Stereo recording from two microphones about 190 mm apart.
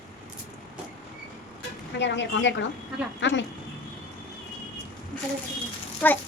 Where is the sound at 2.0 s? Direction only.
70° left (ahead or behind).